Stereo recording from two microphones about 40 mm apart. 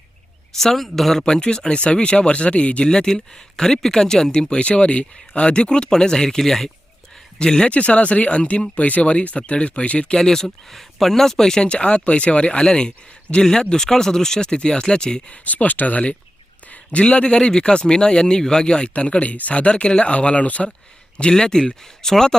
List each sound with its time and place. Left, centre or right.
0.5 s speech: centre
1.2 s speech: left
7.3 s speech: left
7.7 s speech: left
8.7 s speech: left
10.2 s speech: centre
15.3 s speech: left
16.6 s a sound: left
17.0 s speech: left
18.9 s speech: left
21.2 s speech: centre